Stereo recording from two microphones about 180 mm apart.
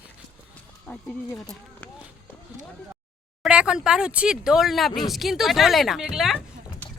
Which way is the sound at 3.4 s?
5° right (ahead or behind).